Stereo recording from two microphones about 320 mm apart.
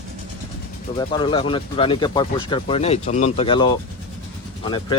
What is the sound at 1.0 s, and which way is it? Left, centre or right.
Speech, centre.